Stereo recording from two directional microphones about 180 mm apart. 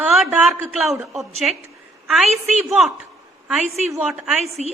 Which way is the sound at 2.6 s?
Centre (ahead or behind).